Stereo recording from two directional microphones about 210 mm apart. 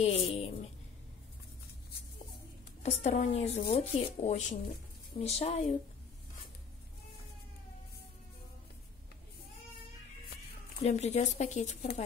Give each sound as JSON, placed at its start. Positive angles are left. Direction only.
{"t": 0.0, "sound": "a sound", "side_deg": 30}
{"t": 2.8, "sound": "speech", "side_deg": 30}
{"t": 10.8, "sound": "speech", "side_deg": 30}